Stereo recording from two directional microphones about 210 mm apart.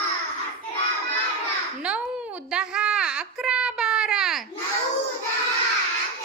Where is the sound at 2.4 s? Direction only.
5° right (ahead or behind).